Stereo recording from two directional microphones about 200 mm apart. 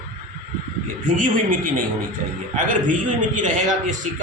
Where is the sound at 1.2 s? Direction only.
40° right (ahead or behind).